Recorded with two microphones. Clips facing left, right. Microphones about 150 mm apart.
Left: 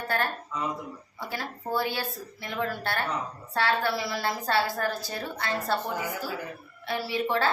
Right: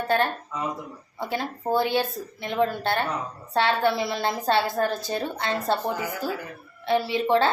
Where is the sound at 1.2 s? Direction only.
20° right (ahead or behind).